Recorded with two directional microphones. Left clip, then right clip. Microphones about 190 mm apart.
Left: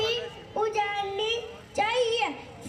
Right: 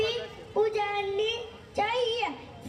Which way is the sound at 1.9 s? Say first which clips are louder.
Left 3 dB; 35° right (ahead or behind).